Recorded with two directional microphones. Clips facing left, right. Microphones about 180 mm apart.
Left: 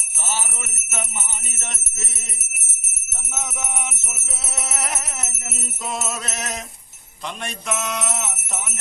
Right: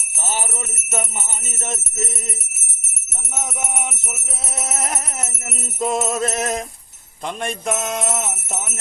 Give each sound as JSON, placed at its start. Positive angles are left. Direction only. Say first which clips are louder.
{"t": 4.5, "sound": "music", "louder": "right 3 dB", "side_deg": -45}